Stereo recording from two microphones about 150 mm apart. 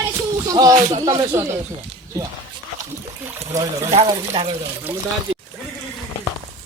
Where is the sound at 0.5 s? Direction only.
25° right (ahead or behind).